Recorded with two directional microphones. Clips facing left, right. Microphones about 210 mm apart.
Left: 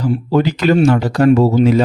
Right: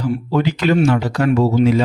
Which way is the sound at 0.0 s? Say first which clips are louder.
Left 3 dB; 35° left (ahead or behind).